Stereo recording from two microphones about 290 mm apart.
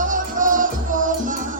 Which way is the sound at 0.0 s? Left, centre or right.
Right.